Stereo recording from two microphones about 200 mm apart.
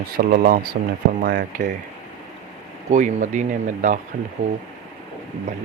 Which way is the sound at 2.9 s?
35° right (ahead or behind).